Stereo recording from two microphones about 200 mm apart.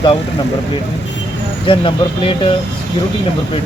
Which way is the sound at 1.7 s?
25° left (ahead or behind).